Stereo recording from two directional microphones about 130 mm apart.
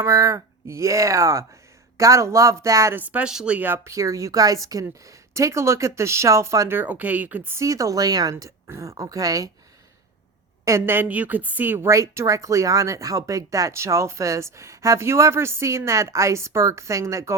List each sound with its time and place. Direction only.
0.0 s speech: 25° right (ahead or behind)
10.7 s speech: 20° right (ahead or behind)